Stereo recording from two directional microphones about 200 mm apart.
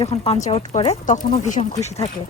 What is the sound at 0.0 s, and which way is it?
Speech, 30° left (ahead or behind).